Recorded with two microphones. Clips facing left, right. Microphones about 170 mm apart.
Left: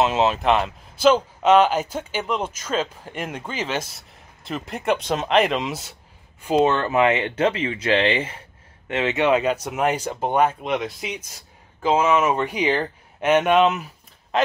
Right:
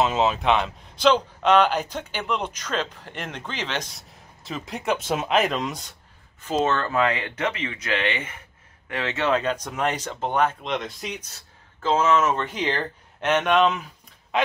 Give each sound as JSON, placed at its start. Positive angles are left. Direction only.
{"t": 0.0, "sound": "speech", "side_deg": 0}
{"t": 2.2, "sound": "speech", "side_deg": 45}
{"t": 2.5, "sound": "speech", "side_deg": 5}
{"t": 6.6, "sound": "speech", "side_deg": 15}